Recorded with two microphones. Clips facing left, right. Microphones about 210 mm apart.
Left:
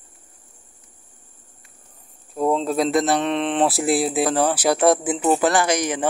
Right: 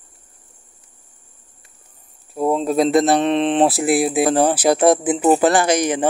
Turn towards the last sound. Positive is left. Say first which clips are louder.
# right 4 dB
turn(degrees=-25)  # may be behind; listen again after turning